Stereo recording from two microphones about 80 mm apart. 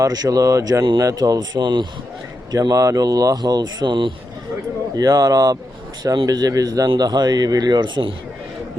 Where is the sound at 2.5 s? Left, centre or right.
Right.